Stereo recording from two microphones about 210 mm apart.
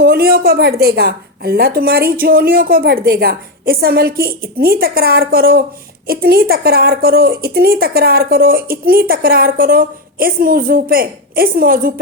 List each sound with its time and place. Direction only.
0.0 s a woman's voice: 45° right (ahead or behind)